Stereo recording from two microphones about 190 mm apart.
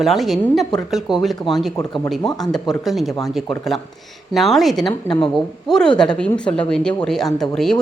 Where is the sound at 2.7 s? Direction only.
Centre (ahead or behind).